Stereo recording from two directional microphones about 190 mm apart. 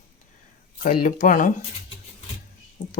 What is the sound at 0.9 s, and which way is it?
Speech, 45° left (ahead or behind).